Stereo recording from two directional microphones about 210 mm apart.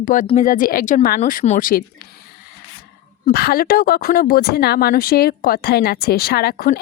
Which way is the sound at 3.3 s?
45° left (ahead or behind).